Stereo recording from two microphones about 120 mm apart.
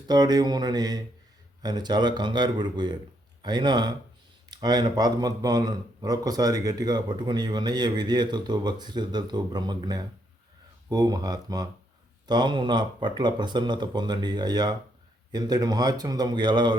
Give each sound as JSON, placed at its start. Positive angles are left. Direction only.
{"t": 0.1, "sound": "speech", "side_deg": -35}